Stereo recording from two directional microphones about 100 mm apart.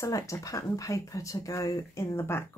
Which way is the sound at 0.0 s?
35° left (ahead or behind).